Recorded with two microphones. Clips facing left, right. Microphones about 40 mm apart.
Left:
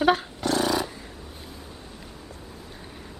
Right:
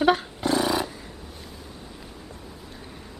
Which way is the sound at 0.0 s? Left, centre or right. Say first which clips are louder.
Right 1 dB; centre.